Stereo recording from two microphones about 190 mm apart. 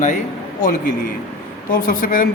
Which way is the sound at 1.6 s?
45° left (ahead or behind).